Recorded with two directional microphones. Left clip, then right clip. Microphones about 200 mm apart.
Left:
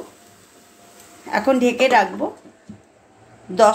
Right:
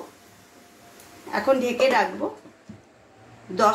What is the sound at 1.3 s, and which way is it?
Speech, 55° left (ahead or behind).